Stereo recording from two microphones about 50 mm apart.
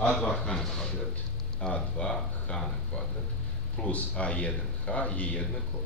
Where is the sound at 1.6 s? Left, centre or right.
Left.